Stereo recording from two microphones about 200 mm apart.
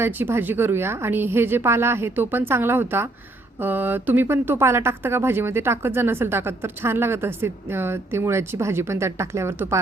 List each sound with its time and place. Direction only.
0.0 s speech: 10° right (ahead or behind)